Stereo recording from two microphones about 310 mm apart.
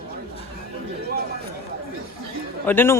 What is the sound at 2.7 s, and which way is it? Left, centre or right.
Speech, centre.